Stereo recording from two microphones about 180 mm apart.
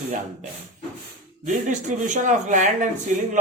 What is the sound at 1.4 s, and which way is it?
Speech, 45° right (ahead or behind).